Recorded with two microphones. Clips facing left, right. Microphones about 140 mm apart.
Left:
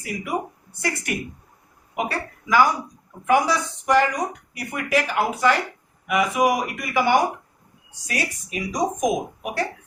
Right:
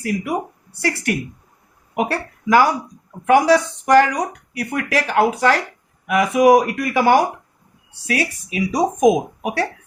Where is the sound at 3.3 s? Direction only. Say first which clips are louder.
Right 6 dB; 80° right.